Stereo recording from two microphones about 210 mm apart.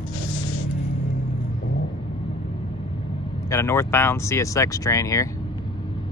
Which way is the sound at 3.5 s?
15° left (ahead or behind).